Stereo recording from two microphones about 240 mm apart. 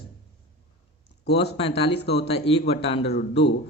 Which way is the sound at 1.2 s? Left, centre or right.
Left.